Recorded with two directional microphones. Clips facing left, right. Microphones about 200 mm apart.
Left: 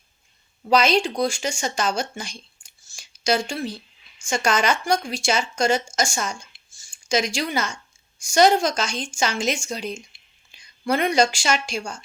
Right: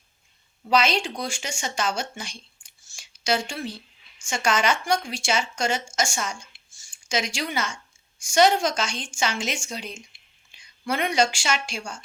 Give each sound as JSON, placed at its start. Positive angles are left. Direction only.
{"t": 0.7, "sound": "a woman's voice", "side_deg": 40}